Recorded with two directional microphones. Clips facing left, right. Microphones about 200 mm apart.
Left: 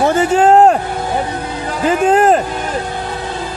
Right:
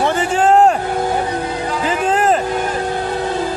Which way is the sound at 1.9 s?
45° left (ahead or behind).